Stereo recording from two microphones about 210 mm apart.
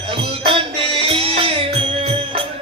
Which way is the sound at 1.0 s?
25° right (ahead or behind).